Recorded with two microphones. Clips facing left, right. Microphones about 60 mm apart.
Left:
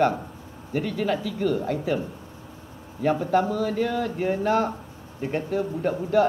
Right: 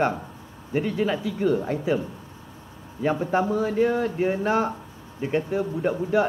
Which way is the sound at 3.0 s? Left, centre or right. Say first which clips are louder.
Left 1 dB; right.